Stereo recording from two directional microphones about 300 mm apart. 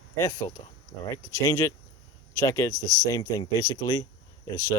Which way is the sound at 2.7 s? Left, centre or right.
Left.